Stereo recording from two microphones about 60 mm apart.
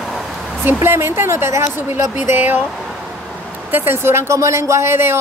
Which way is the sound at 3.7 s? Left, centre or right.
Right.